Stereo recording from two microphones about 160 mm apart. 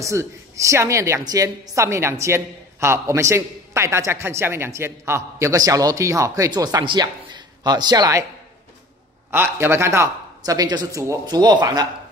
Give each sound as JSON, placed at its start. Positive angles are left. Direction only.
{"t": 0.0, "sound": "a woman's voice", "side_deg": -20}
{"t": 9.3, "sound": "a woman's voice", "side_deg": -15}